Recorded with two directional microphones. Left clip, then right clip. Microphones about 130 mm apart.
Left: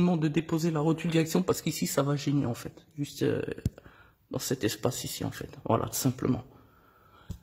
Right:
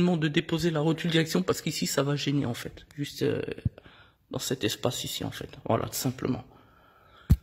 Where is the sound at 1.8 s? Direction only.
Centre (ahead or behind).